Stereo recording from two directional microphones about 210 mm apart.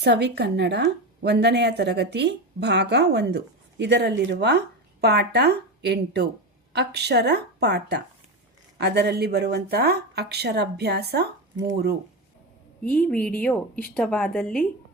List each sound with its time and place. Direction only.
0.0 s a woman's voice: 55° right (ahead or behind)
12.8 s a woman's voice: 5° left (ahead or behind)